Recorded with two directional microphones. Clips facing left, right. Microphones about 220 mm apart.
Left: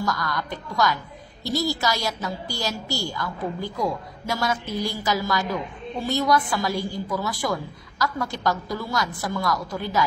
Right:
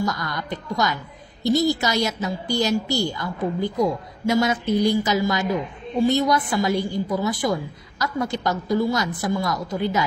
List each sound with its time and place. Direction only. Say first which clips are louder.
0.0 s a woman's voice: right 1 dB; 20° right (ahead or behind)